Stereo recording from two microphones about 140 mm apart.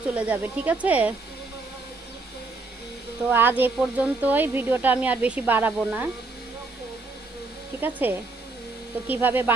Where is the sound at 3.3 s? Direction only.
15° right (ahead or behind).